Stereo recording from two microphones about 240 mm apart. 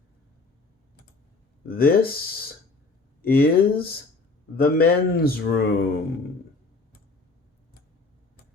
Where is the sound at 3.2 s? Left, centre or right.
Left.